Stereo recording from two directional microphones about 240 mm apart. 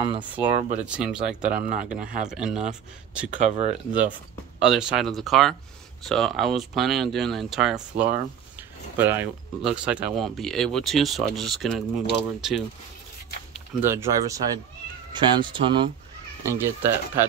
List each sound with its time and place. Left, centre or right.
0.0 s speech: right
0.8 s speech: centre
1.4 s speech: right
2.2 s speech: centre
3.3 s speech: right
4.6 s speech: centre; by 15.9 s right
16.4 s speech: centre